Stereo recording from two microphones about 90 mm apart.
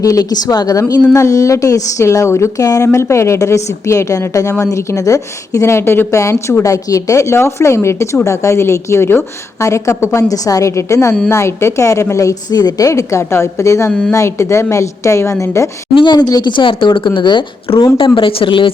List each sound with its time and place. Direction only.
0.0 s speech: 40° left (ahead or behind)
16.0 s speech: 55° left (ahead or behind)